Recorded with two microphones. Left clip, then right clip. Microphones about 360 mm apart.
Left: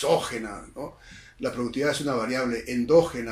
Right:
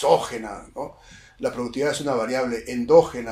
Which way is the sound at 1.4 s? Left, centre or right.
Centre.